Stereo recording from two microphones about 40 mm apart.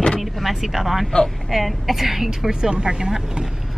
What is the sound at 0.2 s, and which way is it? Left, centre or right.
Vehicle, centre.